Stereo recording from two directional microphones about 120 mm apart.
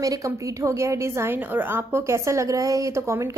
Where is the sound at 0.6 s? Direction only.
25° right (ahead or behind).